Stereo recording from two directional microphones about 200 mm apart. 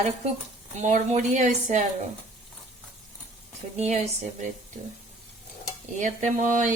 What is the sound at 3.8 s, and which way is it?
Speech, 30° right (ahead or behind).